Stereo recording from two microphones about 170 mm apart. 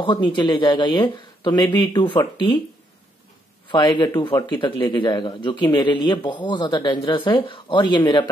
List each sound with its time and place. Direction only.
0.0 s a man's voice: 30° left (ahead or behind)
3.7 s a man's voice: 25° left (ahead or behind)